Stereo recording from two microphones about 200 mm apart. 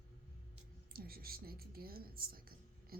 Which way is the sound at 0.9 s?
50° right (ahead or behind).